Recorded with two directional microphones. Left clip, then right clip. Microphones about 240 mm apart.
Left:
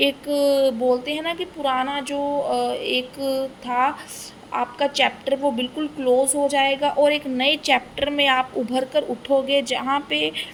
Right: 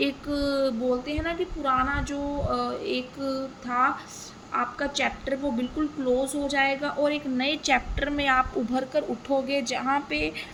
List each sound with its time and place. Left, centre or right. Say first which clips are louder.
0.0 s a woman's voice: left 8 dB; right